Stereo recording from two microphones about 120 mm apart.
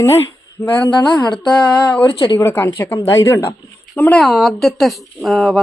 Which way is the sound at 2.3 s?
20° left (ahead or behind).